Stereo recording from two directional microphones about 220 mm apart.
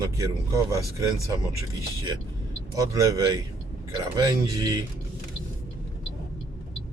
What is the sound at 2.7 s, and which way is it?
A man's voice, 15° right (ahead or behind).